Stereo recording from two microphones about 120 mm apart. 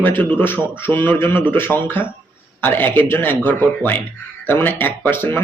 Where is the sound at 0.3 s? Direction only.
15° left (ahead or behind).